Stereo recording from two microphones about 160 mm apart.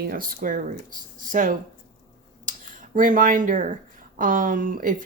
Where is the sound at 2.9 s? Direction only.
55° right (ahead or behind).